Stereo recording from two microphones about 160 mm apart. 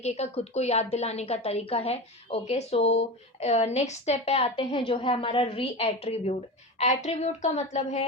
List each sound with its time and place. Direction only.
0.0 s a woman's voice: 45° left (ahead or behind)